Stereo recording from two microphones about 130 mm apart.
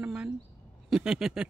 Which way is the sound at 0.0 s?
10° right (ahead or behind).